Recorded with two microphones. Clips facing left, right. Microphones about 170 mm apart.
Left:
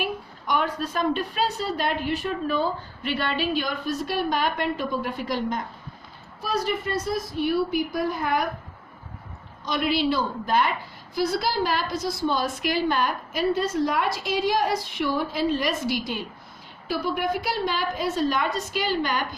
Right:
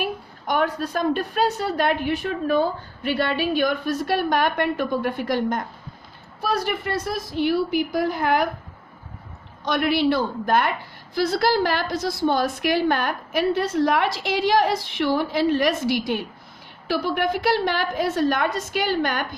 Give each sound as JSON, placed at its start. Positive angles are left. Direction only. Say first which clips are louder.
{"t": 0.0, "sound": "a woman's voice", "louder": "right 2 dB", "side_deg": -50}
{"t": 7.3, "sound": "a woman's voice", "louder": "right 3 dB", "side_deg": -85}
{"t": 9.6, "sound": "a woman's voice", "louder": "right 3 dB", "side_deg": -60}
{"t": 11.1, "sound": "a woman's voice", "louder": "right 4 dB", "side_deg": -70}
{"t": 16.9, "sound": "a woman's voice", "louder": "right 3 dB", "side_deg": -75}